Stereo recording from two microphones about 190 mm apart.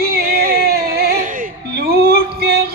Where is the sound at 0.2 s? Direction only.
50° right (ahead or behind).